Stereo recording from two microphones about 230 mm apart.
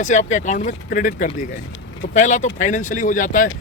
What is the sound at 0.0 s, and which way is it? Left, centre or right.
Speech, left.